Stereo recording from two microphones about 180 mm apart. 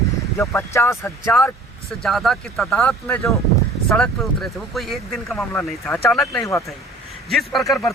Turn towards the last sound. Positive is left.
turn(degrees=0)  # may be behind; listen again after turning